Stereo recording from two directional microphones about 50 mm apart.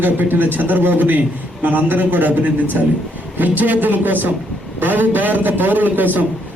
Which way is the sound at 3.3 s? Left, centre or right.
Right.